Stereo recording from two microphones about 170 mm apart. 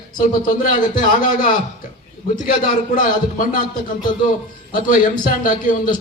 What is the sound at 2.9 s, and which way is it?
Speech, 50° left (ahead or behind).